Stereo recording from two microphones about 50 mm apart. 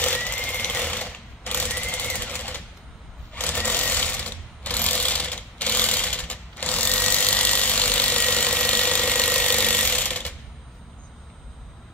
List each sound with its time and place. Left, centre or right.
0.0 s sewing machine: left